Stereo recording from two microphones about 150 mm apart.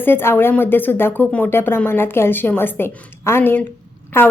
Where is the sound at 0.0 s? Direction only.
15° left (ahead or behind).